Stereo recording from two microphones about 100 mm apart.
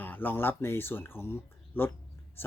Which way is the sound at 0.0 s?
20° left (ahead or behind).